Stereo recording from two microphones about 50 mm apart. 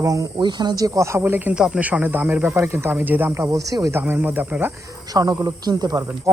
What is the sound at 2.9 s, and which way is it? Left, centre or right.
Speech, right.